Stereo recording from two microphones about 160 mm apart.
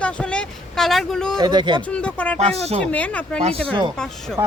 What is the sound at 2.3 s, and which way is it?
Speech, 40° right (ahead or behind).